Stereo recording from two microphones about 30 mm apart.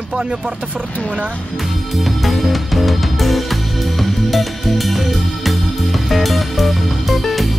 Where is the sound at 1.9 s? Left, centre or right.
Centre.